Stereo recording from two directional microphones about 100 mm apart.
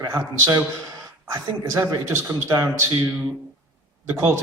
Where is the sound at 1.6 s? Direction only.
30° right (ahead or behind).